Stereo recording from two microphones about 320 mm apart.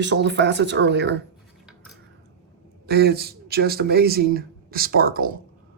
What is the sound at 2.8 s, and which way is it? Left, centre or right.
Speech, right.